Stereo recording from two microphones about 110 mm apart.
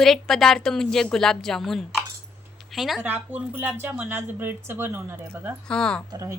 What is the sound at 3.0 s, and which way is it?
Speech, 15° right (ahead or behind).